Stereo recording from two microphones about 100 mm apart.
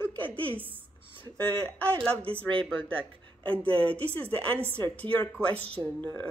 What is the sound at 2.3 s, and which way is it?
Speech, 65° right (ahead or behind).